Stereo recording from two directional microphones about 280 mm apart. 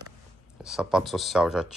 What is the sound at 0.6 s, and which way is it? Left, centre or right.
Speech, centre.